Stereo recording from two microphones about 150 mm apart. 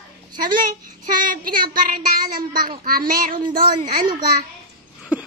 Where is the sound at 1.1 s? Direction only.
70° right (ahead or behind).